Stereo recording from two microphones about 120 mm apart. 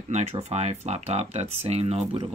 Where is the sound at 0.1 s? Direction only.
65° right (ahead or behind).